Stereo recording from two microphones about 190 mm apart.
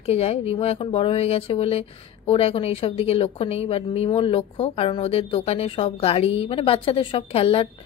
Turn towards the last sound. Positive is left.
turn(degrees=30)  # may be behind; listen again after turning